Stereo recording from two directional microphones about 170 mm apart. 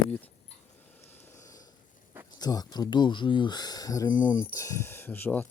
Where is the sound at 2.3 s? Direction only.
25° left (ahead or behind).